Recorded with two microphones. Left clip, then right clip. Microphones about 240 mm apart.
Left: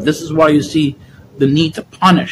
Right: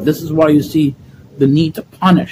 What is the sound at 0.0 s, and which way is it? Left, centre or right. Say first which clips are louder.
Speech: left 1 dB; centre.